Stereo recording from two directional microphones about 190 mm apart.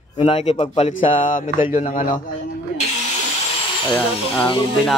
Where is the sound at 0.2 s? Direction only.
35° left (ahead or behind).